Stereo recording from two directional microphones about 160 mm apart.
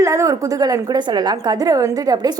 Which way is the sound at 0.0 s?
20° right (ahead or behind).